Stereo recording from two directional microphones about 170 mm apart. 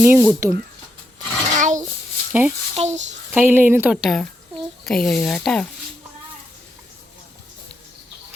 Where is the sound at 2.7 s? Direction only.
40° right (ahead or behind).